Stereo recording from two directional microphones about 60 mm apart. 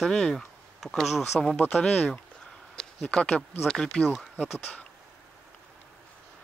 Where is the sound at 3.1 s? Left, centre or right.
Centre.